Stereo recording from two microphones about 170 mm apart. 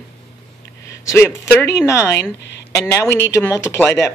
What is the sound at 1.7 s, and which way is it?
Speech, 15° left (ahead or behind).